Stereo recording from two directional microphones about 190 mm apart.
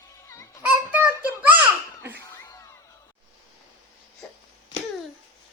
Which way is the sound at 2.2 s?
15° left (ahead or behind).